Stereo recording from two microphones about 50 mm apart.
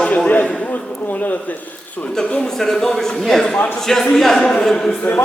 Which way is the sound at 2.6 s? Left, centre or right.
Centre.